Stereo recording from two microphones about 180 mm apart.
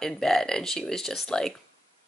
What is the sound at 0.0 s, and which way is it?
Speech, 5° left (ahead or behind).